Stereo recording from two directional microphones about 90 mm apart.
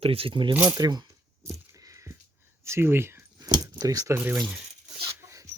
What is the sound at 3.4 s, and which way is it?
Keys jangling, 45° right (ahead or behind).